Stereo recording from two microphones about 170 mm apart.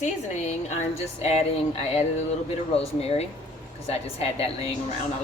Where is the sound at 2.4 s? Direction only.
35° left (ahead or behind).